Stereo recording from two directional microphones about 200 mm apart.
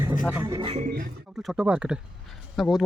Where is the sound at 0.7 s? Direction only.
40° right (ahead or behind).